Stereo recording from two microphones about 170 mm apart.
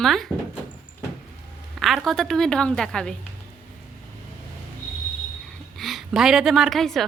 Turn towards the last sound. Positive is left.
turn(degrees=0)  # may be behind; listen again after turning